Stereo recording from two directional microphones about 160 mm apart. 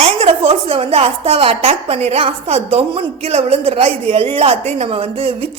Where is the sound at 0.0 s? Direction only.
40° right (ahead or behind).